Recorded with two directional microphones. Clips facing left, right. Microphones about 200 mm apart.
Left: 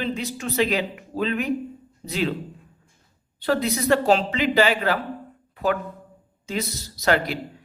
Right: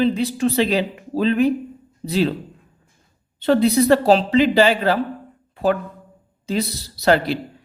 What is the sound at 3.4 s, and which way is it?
Speech, 30° right (ahead or behind).